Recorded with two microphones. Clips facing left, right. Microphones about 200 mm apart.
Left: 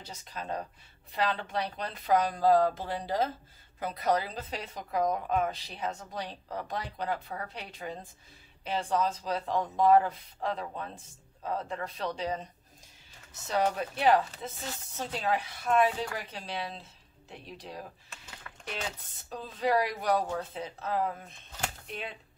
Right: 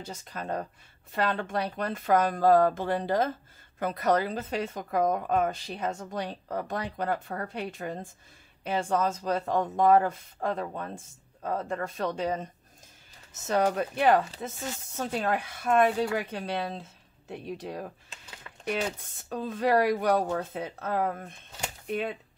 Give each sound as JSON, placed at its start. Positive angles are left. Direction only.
{"t": 0.0, "sound": "a woman's voice", "side_deg": -50}
{"t": 13.5, "sound": "a woman's voice", "side_deg": -50}
{"t": 18.4, "sound": "a sound", "side_deg": -25}
{"t": 18.9, "sound": "a woman's voice", "side_deg": -50}